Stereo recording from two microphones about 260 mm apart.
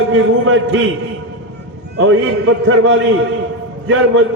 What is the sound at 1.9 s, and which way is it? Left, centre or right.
A man's voice, right.